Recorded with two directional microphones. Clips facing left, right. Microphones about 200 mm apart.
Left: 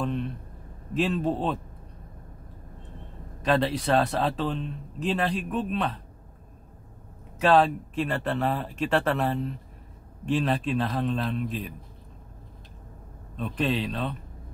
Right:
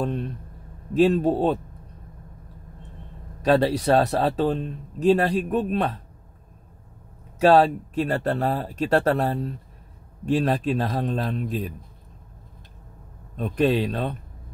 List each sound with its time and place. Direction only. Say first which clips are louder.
0.0 s a sound: right 2 dB; 40° right (ahead or behind)
0.9 s speech: right 7 dB; 40° right (ahead or behind)
3.4 s speech: right 5 dB; 40° right (ahead or behind)
7.3 s speech: right 4 dB; 40° right (ahead or behind)
13.4 s speech: right 6 dB; 45° right (ahead or behind)